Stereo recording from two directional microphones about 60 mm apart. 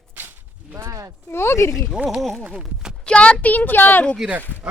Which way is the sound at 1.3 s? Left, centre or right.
Left.